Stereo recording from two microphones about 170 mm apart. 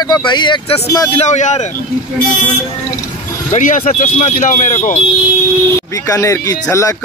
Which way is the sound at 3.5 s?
45° left (ahead or behind).